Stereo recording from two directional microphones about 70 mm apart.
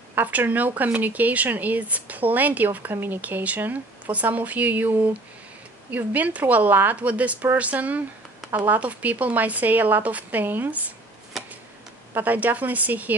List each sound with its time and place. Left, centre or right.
0.1 s speech: right
11.3 s a sound: centre
12.2 s speech: right